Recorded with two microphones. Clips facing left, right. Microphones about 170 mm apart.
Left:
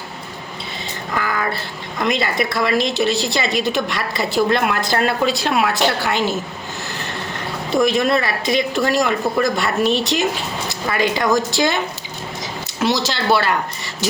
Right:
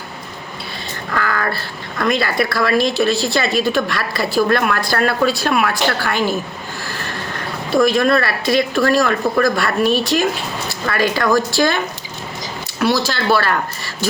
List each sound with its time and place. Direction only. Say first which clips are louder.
1.1 s speech: right 1 dB; 20° left (ahead or behind)
6.8 s vehicle: right 2 dB; 20° left (ahead or behind)
7.7 s speech: right 2 dB; 20° left (ahead or behind)
12.8 s speech: right 2 dB; 20° left (ahead or behind)